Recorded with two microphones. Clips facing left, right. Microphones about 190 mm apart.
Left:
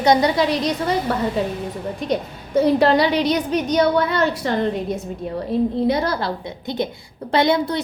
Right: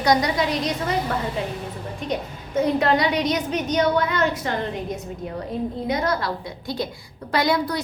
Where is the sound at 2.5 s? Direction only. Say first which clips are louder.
Left 5 dB; 35° left (ahead or behind).